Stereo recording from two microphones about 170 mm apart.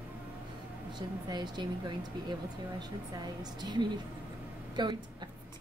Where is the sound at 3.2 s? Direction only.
25° right (ahead or behind).